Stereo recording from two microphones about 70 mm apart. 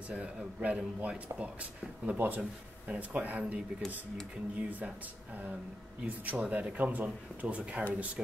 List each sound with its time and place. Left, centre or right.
0.1 s speech: centre
6.0 s speech: centre